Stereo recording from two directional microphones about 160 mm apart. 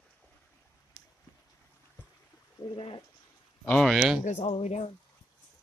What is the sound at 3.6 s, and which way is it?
Speech, 5° left (ahead or behind).